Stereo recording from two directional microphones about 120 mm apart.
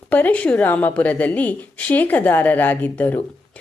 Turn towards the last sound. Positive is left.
turn(degrees=10)  # may be behind; listen again after turning